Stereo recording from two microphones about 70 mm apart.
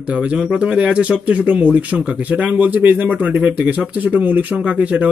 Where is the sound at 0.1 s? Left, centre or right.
Centre.